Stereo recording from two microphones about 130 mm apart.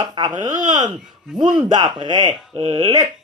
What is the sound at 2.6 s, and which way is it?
Speech, 50° right (ahead or behind).